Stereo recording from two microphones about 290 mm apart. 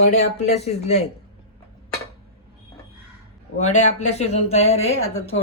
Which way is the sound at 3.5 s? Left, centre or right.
Left.